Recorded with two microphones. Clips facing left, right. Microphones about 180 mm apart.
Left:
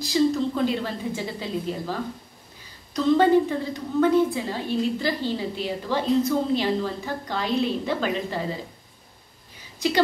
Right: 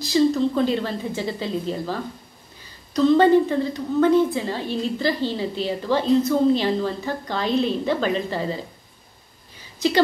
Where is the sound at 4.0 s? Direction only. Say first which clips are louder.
Right 2 dB; 10° left (ahead or behind).